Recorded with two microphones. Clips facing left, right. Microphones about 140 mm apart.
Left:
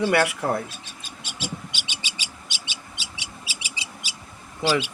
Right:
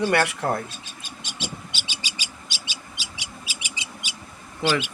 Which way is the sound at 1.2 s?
5° left (ahead or behind).